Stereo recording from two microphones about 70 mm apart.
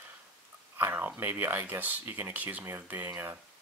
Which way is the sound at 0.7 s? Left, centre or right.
Right.